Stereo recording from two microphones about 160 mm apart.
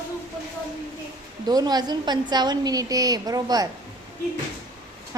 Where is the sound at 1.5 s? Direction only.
25° right (ahead or behind).